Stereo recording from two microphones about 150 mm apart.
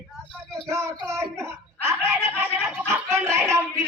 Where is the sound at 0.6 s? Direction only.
20° right (ahead or behind).